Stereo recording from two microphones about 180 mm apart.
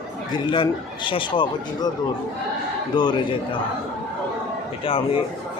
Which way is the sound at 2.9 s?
25° left (ahead or behind).